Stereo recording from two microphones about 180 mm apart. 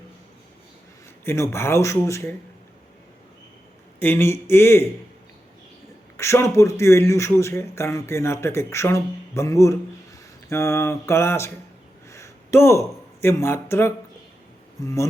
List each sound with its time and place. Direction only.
1.2 s a man's voice: 15° left (ahead or behind)
4.0 s a man's voice: 10° left (ahead or behind)
6.1 s a man's voice: 15° left (ahead or behind)
12.1 s a sound: 15° left (ahead or behind)
13.2 s a man's voice: 15° left (ahead or behind)